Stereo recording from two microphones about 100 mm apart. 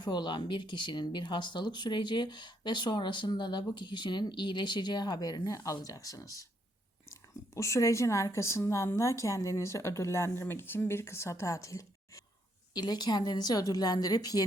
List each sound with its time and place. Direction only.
0.0 s speech: 45° left (ahead or behind)
12.7 s a woman's voice: 45° left (ahead or behind)